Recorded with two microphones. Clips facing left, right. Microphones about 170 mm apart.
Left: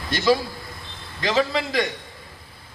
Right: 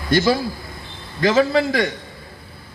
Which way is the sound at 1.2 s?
50° right (ahead or behind).